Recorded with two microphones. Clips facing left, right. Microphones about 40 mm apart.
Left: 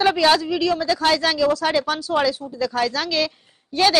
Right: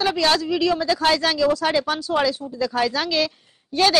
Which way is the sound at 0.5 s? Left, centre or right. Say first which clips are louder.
Even; centre.